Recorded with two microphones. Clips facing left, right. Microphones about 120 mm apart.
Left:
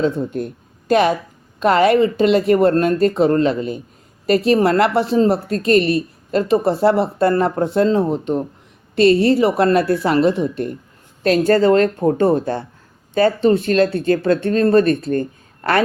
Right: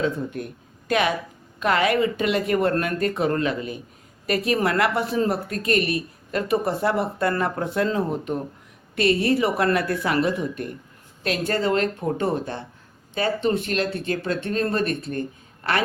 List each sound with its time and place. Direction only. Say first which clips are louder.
0.9 s a woman's voice: left 7 dB; 35° left (ahead or behind)